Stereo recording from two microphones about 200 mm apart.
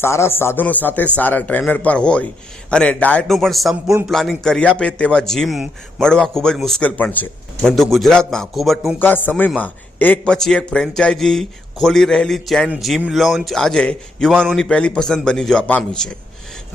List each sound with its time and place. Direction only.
0.0 s a man's voice: 15° left (ahead or behind)